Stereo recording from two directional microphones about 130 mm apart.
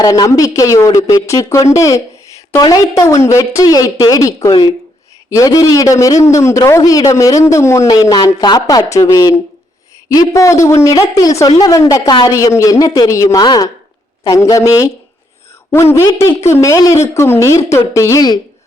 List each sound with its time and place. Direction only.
0.0 s a man's voice: 25° left (ahead or behind)